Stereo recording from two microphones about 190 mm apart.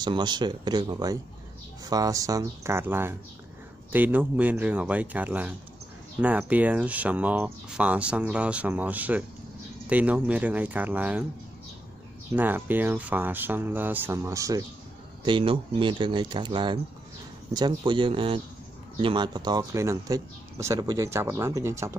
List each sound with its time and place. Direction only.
0.0 s speech: 25° right (ahead or behind); by 11.2 s 10° right (ahead or behind)
12.4 s speech: 10° right (ahead or behind)
15.2 s speech: 25° right (ahead or behind)